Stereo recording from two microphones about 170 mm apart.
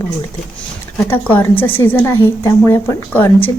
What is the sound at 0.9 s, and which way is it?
A woman's voice, 10° left (ahead or behind).